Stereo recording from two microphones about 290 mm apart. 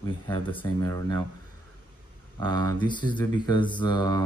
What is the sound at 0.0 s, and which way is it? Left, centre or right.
Speech, centre.